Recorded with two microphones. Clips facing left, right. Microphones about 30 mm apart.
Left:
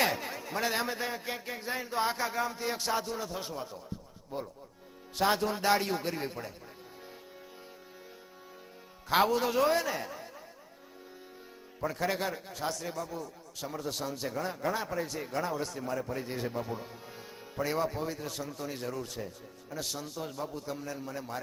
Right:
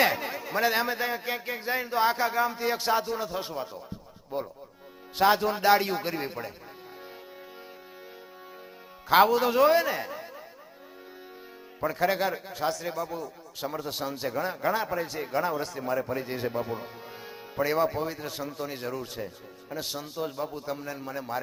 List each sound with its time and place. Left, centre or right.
0.0 s a man's voice: centre
9.0 s a man's voice: centre
11.8 s a man's voice: centre